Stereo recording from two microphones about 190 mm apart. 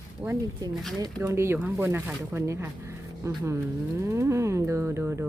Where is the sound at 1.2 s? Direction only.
15° right (ahead or behind).